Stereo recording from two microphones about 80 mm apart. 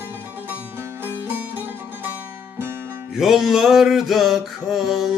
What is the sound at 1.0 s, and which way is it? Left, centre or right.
Music, right.